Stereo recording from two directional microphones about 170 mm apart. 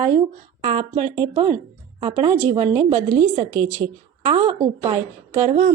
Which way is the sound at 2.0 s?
25° right (ahead or behind).